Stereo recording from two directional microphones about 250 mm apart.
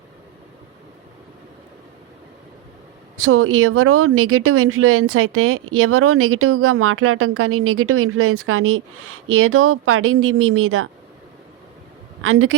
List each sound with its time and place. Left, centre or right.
3.2 s speech: right
12.2 s speech: right